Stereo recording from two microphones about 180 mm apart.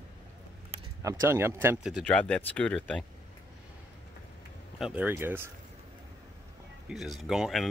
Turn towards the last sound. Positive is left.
turn(degrees=0)  # may be behind; listen again after turning